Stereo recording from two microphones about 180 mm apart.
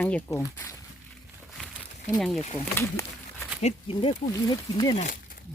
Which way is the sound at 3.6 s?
35° left (ahead or behind).